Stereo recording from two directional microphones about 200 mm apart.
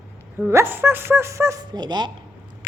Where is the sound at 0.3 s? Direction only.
10° right (ahead or behind).